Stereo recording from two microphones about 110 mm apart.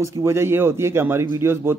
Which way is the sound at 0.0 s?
25° right (ahead or behind).